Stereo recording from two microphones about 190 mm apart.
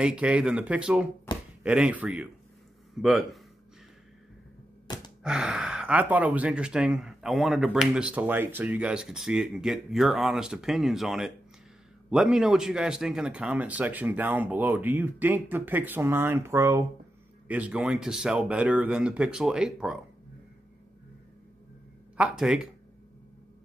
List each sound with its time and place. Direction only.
0.0 s speech: 5° right (ahead or behind)
1.3 s a sound: 25° left (ahead or behind)
1.6 s speech: 5° right (ahead or behind)
4.8 s gasp: 20° left (ahead or behind)
5.2 s speech: 5° right (ahead or behind)
22.1 s speech: 5° right (ahead or behind)